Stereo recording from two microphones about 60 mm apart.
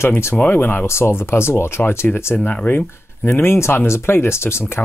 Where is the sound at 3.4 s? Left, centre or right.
Left.